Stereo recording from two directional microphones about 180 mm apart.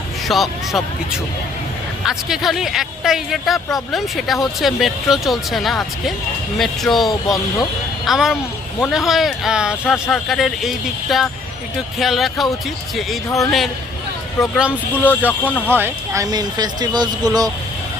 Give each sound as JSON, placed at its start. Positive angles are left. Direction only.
{"t": 0.3, "sound": "speech", "side_deg": 0}
{"t": 2.0, "sound": "speech", "side_deg": 0}
{"t": 14.3, "sound": "speech", "side_deg": 15}
{"t": 15.8, "sound": "speech", "side_deg": -20}